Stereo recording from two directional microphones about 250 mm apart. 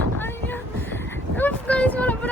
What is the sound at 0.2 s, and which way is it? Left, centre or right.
Vehicle, centre.